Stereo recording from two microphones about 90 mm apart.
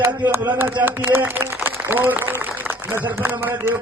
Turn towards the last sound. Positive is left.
turn(degrees=-25)  # may be behind; listen again after turning